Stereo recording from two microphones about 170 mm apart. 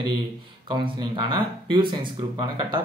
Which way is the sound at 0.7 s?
30° right (ahead or behind).